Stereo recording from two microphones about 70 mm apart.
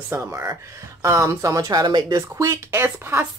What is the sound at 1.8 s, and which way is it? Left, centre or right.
Speech, right.